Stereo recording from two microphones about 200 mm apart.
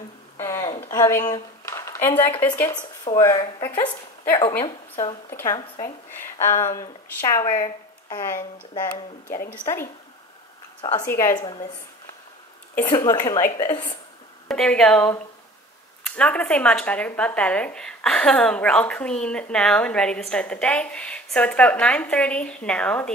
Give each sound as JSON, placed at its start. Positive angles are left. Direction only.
{"t": 0.4, "sound": "a sound", "side_deg": 15}
{"t": 2.1, "sound": "speech", "side_deg": 25}
{"t": 2.4, "sound": "speech", "side_deg": 10}
{"t": 6.4, "sound": "speech", "side_deg": 15}
{"t": 9.5, "sound": "speech", "side_deg": 10}
{"t": 10.8, "sound": "a woman's voice", "side_deg": 20}
{"t": 12.9, "sound": "speech", "side_deg": 20}
{"t": 14.5, "sound": "speech", "side_deg": 5}
{"t": 16.2, "sound": "speech", "side_deg": 5}